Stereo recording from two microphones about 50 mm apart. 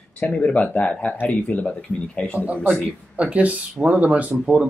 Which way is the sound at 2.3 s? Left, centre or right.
Right.